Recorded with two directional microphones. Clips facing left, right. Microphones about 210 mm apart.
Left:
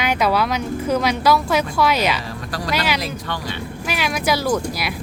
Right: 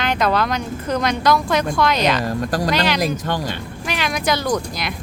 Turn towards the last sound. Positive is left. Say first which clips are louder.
# left 1 dB
turn(degrees=5)  # may be behind; listen again after turning